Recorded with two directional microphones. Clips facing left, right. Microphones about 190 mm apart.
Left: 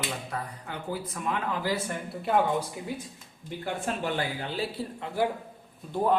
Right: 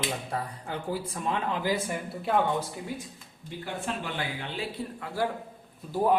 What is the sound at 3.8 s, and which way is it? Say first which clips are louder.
Speech: left 4 dB; 40° left (ahead or behind).